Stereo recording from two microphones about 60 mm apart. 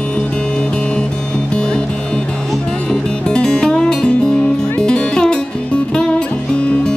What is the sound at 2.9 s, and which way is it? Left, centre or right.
Music, centre.